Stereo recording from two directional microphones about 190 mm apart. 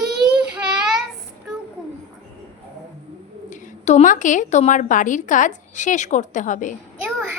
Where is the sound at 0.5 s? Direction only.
5° right (ahead or behind).